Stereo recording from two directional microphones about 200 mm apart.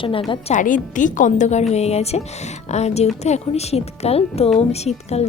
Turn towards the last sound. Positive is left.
turn(degrees=30)  # may be behind; listen again after turning